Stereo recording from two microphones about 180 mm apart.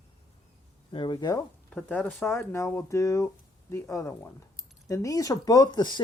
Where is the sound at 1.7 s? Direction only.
10° left (ahead or behind).